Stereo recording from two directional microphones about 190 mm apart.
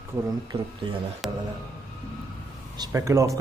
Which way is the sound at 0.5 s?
30° right (ahead or behind).